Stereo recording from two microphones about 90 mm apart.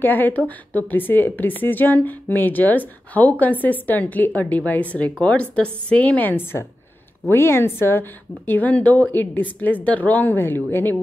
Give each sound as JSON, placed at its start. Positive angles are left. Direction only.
{"t": 0.0, "sound": "speech", "side_deg": 20}